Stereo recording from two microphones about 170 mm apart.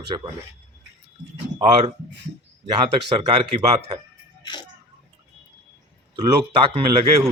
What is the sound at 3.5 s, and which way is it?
Speech, 25° right (ahead or behind).